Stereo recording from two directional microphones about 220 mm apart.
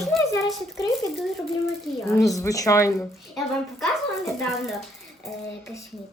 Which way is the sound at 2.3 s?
15° left (ahead or behind).